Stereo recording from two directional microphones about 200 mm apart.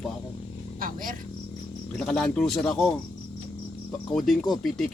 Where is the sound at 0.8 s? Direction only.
45° right (ahead or behind).